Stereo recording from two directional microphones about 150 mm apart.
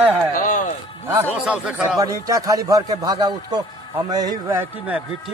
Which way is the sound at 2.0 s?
20° right (ahead or behind).